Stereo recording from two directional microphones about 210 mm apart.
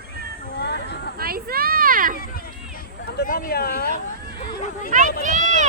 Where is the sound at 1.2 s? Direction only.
45° right (ahead or behind).